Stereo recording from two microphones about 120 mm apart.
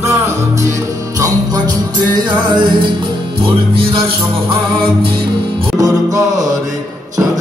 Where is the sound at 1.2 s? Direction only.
35° right (ahead or behind).